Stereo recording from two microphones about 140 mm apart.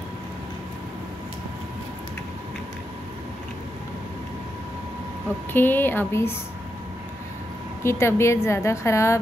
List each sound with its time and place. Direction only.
5.5 s a woman's voice: 15° left (ahead or behind)
7.8 s a woman's voice: 20° left (ahead or behind)